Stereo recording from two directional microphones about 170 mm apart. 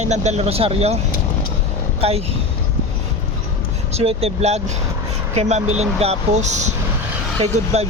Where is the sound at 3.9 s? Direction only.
35° right (ahead or behind).